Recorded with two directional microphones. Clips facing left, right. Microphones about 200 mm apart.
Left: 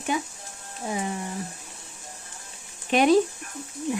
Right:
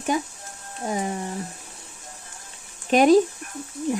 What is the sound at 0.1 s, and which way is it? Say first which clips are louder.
Speech: right 3 dB; 45° right (ahead or behind).